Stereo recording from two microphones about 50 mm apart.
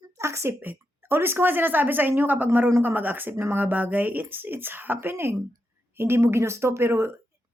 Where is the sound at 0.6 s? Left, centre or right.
Right.